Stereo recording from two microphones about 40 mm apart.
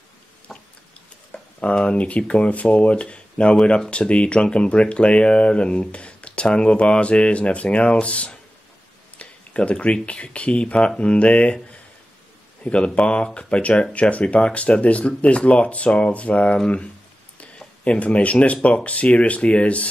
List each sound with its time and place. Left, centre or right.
0.5 s a sound: centre
1.3 s a sound: left
1.9 s speech: left
9.2 s tick-tock: left
10.0 s speech: left
12.6 s speech: left
17.8 s speech: left